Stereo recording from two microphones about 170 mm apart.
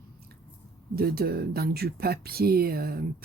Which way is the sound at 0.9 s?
65° right (ahead or behind).